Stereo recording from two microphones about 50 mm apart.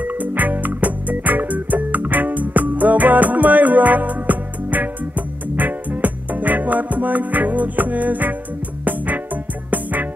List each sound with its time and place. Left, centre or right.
0.0 s music: right